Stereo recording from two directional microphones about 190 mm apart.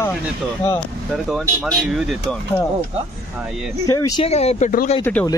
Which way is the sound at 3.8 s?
20° left (ahead or behind).